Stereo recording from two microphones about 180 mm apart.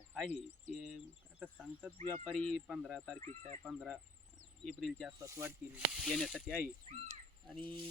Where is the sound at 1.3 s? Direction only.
5° right (ahead or behind).